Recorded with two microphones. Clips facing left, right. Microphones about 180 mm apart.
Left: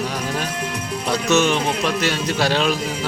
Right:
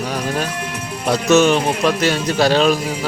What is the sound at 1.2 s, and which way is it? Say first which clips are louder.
A man's voice: right 5 dB; 45° right (ahead or behind).